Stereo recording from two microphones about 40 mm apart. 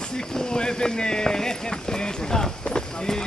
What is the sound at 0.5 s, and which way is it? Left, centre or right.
Speech, centre.